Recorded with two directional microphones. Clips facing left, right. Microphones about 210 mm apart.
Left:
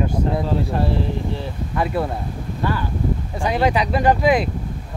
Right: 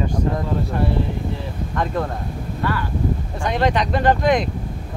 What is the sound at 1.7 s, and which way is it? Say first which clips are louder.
Speech: left 1 dB; 10° left (ahead or behind).